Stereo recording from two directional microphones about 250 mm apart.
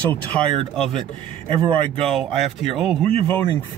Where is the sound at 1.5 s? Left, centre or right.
Right.